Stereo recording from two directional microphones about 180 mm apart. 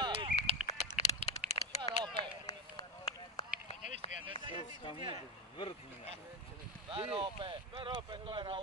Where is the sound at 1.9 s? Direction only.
25° right (ahead or behind).